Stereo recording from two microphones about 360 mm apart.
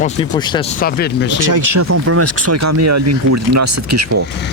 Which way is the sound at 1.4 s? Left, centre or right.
Right.